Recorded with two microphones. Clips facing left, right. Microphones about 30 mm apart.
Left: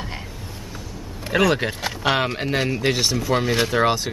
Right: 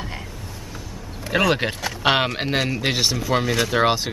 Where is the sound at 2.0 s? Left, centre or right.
Right.